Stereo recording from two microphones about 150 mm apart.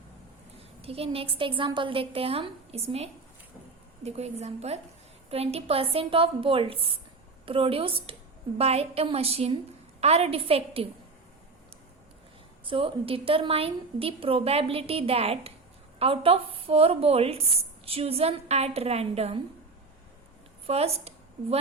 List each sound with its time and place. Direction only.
0.8 s a woman's voice: 40° right (ahead or behind)
12.6 s a woman's voice: 35° right (ahead or behind)
20.7 s a woman's voice: 40° right (ahead or behind)